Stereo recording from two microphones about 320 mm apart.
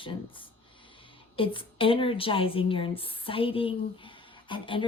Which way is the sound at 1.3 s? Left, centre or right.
Centre.